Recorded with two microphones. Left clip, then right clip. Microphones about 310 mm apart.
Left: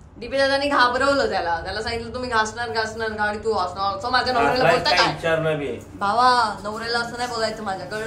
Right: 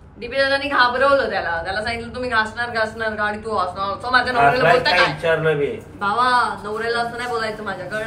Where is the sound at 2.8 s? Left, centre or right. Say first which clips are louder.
Right 2 dB; centre.